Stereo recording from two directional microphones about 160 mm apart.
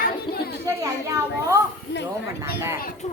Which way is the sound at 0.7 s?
20° right (ahead or behind).